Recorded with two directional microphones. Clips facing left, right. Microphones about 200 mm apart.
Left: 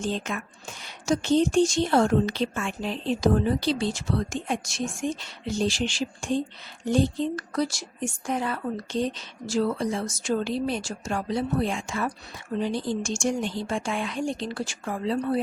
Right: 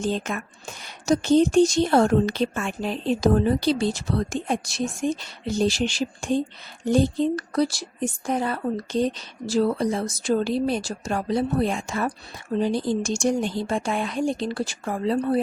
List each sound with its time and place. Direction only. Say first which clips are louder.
0.0 s a woman's voice: right 3 dB; 40° right (ahead or behind)